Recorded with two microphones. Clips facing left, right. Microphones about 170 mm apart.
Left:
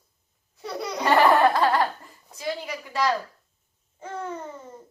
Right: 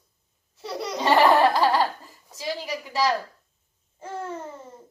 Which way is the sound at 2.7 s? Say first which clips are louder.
Right 2 dB; 20° right (ahead or behind).